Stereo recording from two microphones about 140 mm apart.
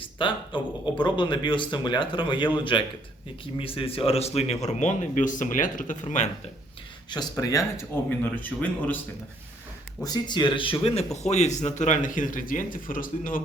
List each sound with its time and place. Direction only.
0.2 s speech: 35° left (ahead or behind); by 6.2 s 60° left (ahead or behind)
7.1 s speech: 25° left (ahead or behind); by 9.0 s 10° left (ahead or behind)
10.0 s speech: 30° left (ahead or behind); by 13.4 s 80° left